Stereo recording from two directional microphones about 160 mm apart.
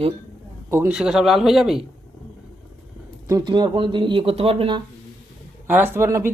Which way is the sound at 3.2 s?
25° right (ahead or behind).